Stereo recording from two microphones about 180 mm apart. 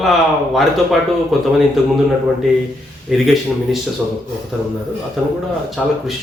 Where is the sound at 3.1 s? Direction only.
5° right (ahead or behind).